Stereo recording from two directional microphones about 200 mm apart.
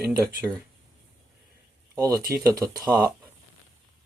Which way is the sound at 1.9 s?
15° right (ahead or behind).